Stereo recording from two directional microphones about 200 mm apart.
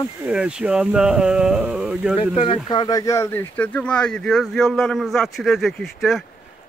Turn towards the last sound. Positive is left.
turn(degrees=0)  # may be behind; listen again after turning